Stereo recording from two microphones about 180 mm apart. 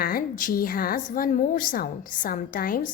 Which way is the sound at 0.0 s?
55° left (ahead or behind).